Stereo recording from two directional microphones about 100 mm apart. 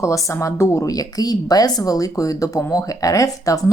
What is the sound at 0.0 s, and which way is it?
Speech, 30° left (ahead or behind).